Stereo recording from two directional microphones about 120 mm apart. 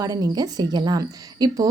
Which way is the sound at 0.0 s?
30° right (ahead or behind).